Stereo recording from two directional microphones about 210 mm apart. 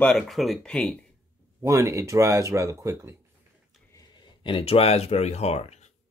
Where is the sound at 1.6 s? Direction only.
15° right (ahead or behind).